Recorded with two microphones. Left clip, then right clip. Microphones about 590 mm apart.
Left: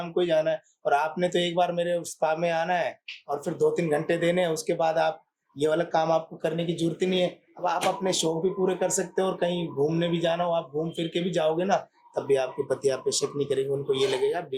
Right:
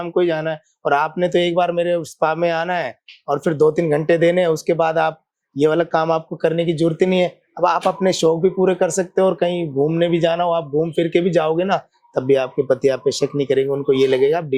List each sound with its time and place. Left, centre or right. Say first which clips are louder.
0.0 s speech: right 5 dB; right